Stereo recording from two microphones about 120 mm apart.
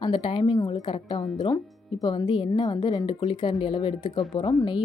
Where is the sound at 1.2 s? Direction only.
35° left (ahead or behind).